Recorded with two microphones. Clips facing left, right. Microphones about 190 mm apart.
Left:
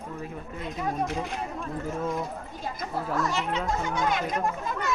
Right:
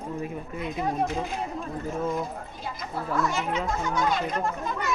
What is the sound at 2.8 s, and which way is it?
Speech, 40° left (ahead or behind).